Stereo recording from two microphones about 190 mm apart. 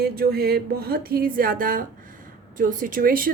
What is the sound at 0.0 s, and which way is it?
A woman's voice, 55° right (ahead or behind).